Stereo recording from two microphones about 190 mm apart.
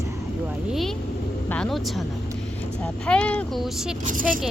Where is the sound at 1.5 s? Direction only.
5° left (ahead or behind).